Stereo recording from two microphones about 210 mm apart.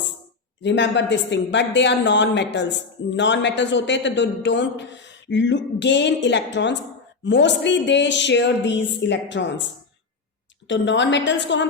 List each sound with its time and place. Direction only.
0.6 s a woman's voice: 60° left (ahead or behind)
10.7 s a woman's voice: 60° left (ahead or behind)